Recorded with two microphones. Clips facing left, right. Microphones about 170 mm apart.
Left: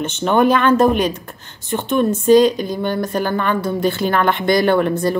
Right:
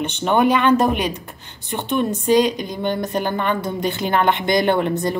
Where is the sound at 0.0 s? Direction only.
15° right (ahead or behind).